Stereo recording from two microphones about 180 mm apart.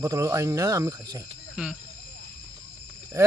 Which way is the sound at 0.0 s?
20° right (ahead or behind).